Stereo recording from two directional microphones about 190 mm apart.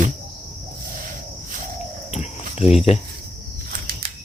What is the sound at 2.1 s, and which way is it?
Cricket, 35° left (ahead or behind).